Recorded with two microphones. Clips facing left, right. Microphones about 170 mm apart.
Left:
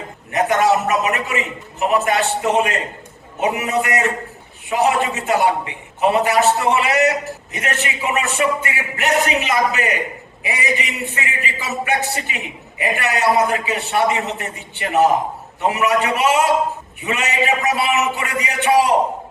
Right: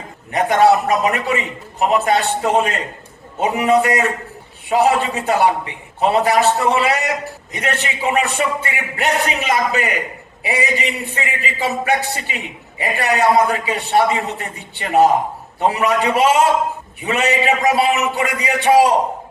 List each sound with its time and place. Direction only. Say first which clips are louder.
0.3 s a man's voice: right 3 dB; 35° right (ahead or behind)